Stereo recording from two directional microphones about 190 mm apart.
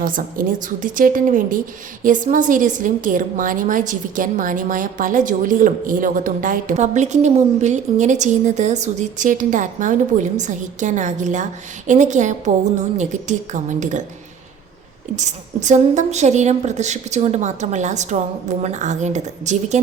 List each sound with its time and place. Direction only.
0.0 s a woman's voice: 45° right (ahead or behind)
15.1 s a woman's voice: 40° right (ahead or behind)